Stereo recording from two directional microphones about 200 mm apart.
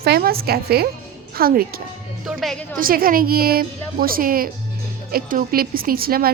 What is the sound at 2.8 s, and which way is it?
A woman's voice, 45° right (ahead or behind).